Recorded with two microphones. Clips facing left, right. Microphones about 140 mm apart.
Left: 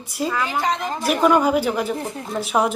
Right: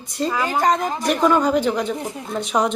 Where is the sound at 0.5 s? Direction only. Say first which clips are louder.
Right 8 dB; 45° right (ahead or behind).